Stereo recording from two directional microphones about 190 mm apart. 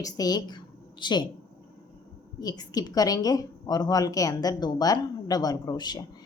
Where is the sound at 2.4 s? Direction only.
20° left (ahead or behind).